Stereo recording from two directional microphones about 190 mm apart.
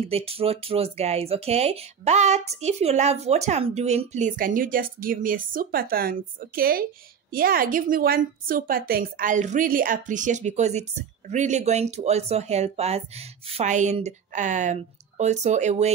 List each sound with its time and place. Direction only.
0.1 s speech: 30° right (ahead or behind)